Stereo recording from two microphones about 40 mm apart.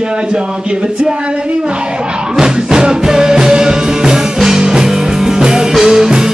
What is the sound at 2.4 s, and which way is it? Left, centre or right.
Music, centre.